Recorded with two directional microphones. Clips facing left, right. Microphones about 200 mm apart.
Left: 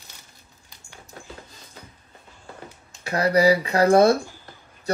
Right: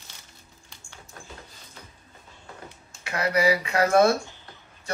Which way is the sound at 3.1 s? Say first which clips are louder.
Left 5 dB; 35° left (ahead or behind).